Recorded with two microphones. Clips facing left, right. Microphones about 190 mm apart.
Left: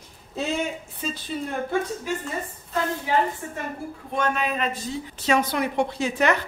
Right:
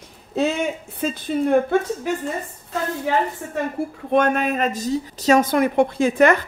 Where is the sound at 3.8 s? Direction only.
75° right (ahead or behind).